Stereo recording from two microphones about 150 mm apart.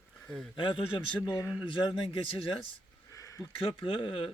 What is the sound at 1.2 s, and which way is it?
Speech, 15° left (ahead or behind).